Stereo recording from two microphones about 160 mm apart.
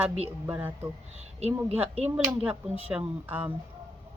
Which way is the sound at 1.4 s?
40° right (ahead or behind).